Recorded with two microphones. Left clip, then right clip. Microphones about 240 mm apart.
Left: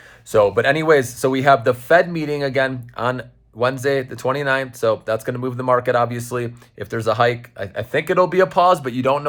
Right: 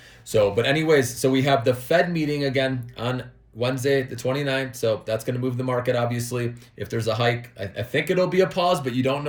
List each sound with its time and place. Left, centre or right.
0.3 s speech: centre
5.5 s speech: left
5.8 s speech: centre